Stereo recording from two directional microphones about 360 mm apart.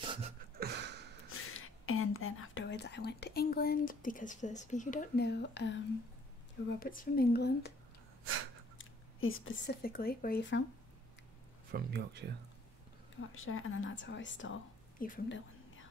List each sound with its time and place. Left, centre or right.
0.0 s a sound: centre
0.6 s a sound: right
1.3 s speech: left
6.8 s speech: left
8.7 s speech: left
11.7 s speech: right
13.3 s a woman's voice: left
15.0 s whispering: left